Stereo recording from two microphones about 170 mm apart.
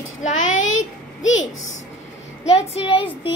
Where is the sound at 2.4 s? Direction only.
35° left (ahead or behind).